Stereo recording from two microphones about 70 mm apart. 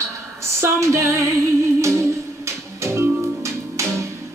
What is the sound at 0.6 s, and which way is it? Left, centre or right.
Female singing, right.